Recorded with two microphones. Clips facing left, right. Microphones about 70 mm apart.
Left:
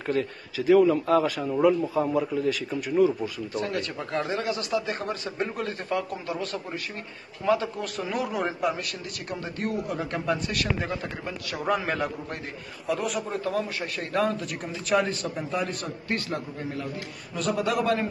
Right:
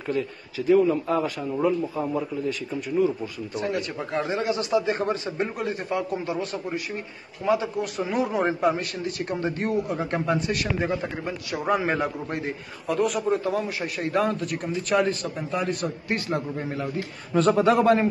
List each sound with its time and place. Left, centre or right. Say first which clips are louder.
0.0 s a man's voice: even; left
0.7 s speech: left 1 dB; left
1.1 s speech: left 3 dB; left
1.8 s a man's voice: left 2 dB; centre
2.1 s a man's voice: left 2 dB; left
3.5 s speech: right 3 dB; centre
12.8 s a man's voice: right 5 dB; centre
16.1 s speech: right 2 dB; right
17.3 s a man's voice: right 7 dB; right